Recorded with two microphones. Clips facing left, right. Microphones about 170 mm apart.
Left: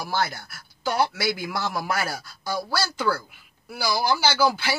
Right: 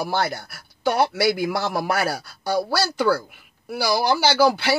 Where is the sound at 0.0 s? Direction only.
60° right (ahead or behind).